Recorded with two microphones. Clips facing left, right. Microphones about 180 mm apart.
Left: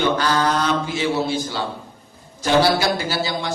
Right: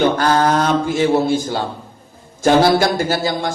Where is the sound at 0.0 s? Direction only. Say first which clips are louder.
Right 4 dB; 50° right (ahead or behind).